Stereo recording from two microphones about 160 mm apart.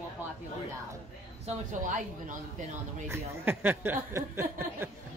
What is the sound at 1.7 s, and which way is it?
Speech, 50° right (ahead or behind).